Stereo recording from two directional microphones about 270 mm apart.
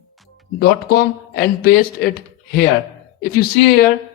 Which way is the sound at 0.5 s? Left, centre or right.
Left.